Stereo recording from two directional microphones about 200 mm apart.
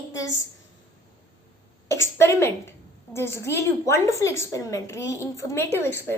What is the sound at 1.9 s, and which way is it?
A woman's voice, 15° left (ahead or behind).